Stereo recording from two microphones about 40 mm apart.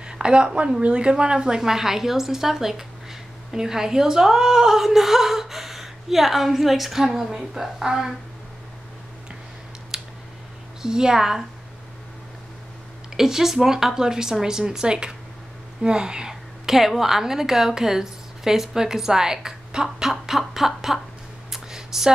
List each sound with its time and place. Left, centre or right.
0.0 s speech: right
1.6 s a woman's voice: centre
9.9 s scissors: centre
10.8 s a woman's voice: centre
13.1 s a woman's voice: centre
21.5 s a sound: centre